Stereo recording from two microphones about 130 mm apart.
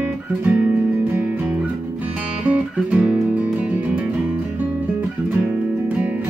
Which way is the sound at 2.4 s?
10° right (ahead or behind).